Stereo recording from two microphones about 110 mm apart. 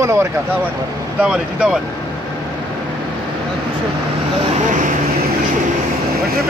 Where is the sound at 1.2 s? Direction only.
10° right (ahead or behind).